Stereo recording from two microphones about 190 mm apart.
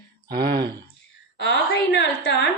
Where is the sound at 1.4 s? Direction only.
65° left (ahead or behind).